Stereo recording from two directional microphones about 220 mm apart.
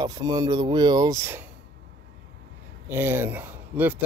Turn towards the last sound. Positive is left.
turn(degrees=-10)  # may be behind; listen again after turning